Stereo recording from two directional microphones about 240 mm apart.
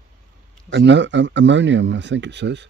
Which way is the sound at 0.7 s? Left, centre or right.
Right.